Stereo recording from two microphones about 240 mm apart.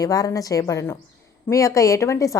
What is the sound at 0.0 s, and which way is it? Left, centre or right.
A woman's voice, centre.